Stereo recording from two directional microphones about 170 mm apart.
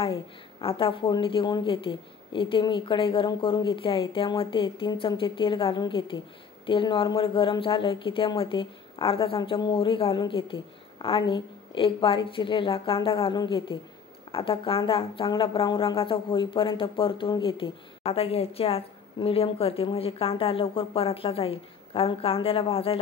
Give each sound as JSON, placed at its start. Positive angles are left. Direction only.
{"t": 0.0, "sound": "a woman's voice", "side_deg": 35}